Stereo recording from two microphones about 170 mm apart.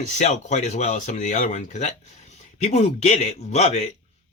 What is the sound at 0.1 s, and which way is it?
Speech, 45° left (ahead or behind).